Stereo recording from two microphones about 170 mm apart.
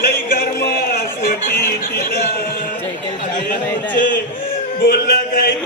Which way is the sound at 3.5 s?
50° left (ahead or behind).